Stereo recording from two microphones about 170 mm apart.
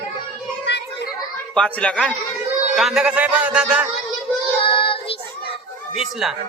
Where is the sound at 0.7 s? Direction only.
75° left (ahead or behind).